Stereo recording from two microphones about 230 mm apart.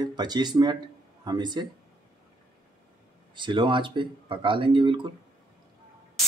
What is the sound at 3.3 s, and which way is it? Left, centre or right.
Speech, right.